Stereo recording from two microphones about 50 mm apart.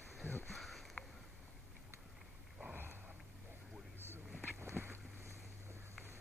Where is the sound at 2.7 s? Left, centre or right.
Right.